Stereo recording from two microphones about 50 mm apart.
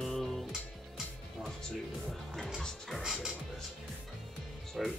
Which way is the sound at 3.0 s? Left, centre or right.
Centre.